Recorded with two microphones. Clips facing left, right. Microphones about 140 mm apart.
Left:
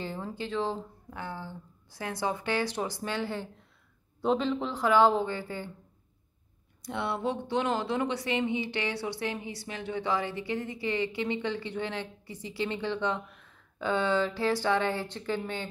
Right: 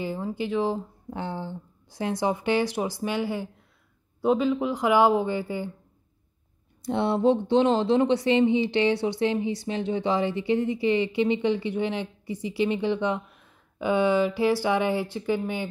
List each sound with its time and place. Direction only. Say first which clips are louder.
0.0 s speech: right 6 dB; 10° right (ahead or behind)
1.1 s speech: right 6 dB; 25° right (ahead or behind)
6.8 s speech: right 9 dB; 30° right (ahead or behind); by 15.6 s 10° right (ahead or behind)